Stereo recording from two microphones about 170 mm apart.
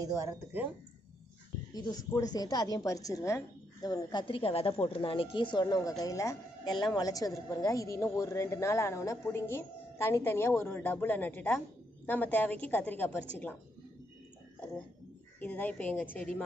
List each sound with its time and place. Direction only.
0.0 s speech: 15° right (ahead or behind)
1.7 s a woman's voice: 25° left (ahead or behind)
15.4 s a woman's voice: 10° left (ahead or behind)